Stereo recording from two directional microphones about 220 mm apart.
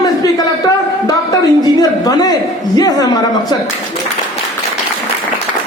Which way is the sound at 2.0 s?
15° left (ahead or behind).